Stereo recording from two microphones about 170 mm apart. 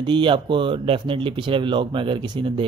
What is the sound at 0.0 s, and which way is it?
Speech, 30° right (ahead or behind).